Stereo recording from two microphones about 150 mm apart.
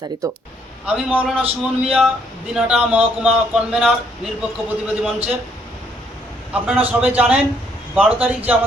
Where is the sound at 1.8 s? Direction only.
5° right (ahead or behind).